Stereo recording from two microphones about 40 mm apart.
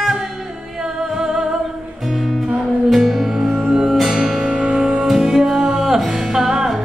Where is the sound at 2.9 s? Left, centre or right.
Centre.